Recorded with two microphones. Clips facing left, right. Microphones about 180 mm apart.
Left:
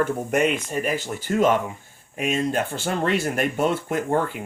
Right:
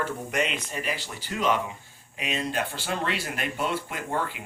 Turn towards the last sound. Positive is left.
turn(degrees=50)  # may be behind; listen again after turning